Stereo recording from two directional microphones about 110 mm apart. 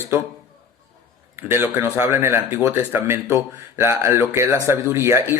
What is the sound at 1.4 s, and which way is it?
Speech, 20° right (ahead or behind).